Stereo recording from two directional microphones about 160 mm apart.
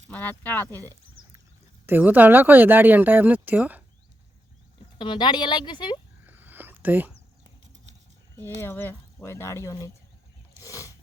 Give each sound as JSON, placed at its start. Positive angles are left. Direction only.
{"t": 0.1, "sound": "speech", "side_deg": 10}
{"t": 1.9, "sound": "speech", "side_deg": -10}
{"t": 4.9, "sound": "speech", "side_deg": 30}
{"t": 6.2, "sound": "a sound", "side_deg": -10}
{"t": 8.4, "sound": "speech", "side_deg": 15}
{"t": 10.6, "sound": "wild animals", "side_deg": 20}